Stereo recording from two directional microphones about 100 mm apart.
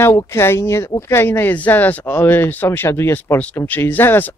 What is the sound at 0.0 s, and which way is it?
Speech, 30° left (ahead or behind).